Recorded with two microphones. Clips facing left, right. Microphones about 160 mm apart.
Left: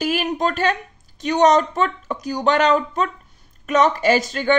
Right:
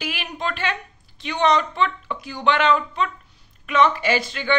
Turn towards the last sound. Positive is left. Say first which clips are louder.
# left 5 dB
turn(degrees=45)  # may be behind; listen again after turning